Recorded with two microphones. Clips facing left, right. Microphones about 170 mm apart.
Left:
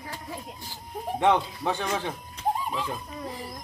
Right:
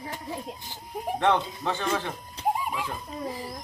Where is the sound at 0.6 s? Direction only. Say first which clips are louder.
Right 1 dB; 20° right (ahead or behind).